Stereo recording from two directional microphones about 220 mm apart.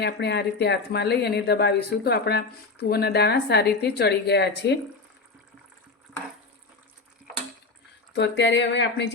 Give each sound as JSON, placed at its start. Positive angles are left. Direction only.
{"t": 0.0, "sound": "speech", "side_deg": 50}
{"t": 8.1, "sound": "speech", "side_deg": 55}